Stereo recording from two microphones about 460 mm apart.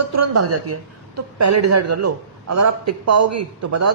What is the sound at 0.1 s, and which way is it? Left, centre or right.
A woman's voice, right.